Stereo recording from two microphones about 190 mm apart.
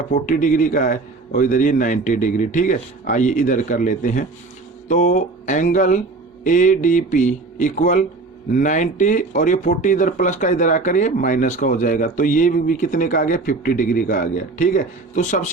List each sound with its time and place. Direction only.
0.1 s speech: 45° left (ahead or behind)